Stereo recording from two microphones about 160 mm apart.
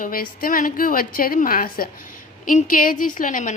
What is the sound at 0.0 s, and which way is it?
A woman's voice, 60° left (ahead or behind).